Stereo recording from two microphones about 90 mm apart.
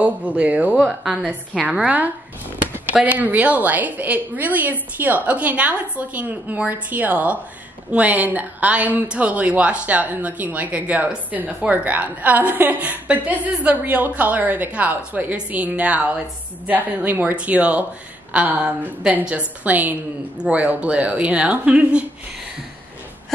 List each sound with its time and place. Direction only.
0.4 s a woman's voice: 15° right (ahead or behind)